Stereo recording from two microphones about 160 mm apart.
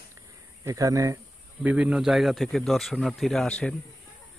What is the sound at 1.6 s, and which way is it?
Speech, 10° right (ahead or behind).